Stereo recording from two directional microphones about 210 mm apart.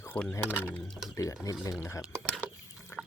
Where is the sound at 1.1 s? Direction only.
15° left (ahead or behind).